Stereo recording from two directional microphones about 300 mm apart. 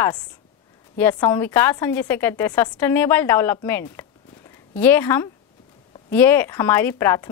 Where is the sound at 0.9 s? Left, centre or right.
Centre.